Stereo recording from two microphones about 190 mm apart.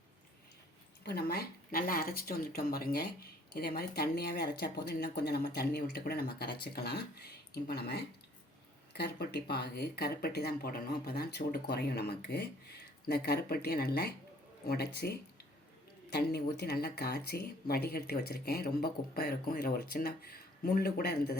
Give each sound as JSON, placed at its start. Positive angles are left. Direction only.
{"t": 1.0, "sound": "a woman's voice", "side_deg": 55}